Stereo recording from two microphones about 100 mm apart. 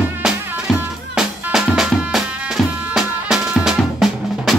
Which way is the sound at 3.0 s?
5° right (ahead or behind).